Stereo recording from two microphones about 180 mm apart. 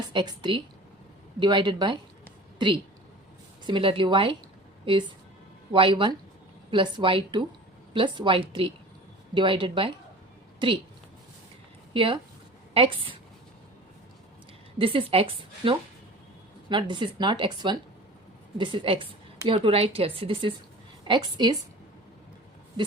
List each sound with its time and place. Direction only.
0.1 s speech: 25° right (ahead or behind)
3.7 s speech: 30° right (ahead or behind)
11.9 s speech: 30° right (ahead or behind)
14.8 s speech: 30° right (ahead or behind)